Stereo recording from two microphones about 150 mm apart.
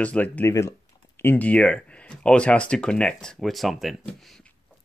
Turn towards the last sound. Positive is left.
turn(degrees=0)  # may be behind; listen again after turning